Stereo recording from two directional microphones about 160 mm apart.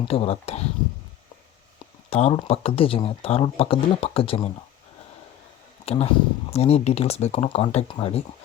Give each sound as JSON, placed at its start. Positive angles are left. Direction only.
{"t": 0.0, "sound": "speech", "side_deg": 35}
{"t": 2.0, "sound": "speech", "side_deg": 40}
{"t": 5.8, "sound": "speech", "side_deg": 40}